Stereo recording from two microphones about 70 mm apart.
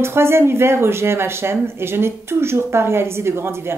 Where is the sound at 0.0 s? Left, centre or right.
Right.